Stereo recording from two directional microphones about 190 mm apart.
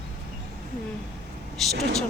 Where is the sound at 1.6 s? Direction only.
Centre (ahead or behind).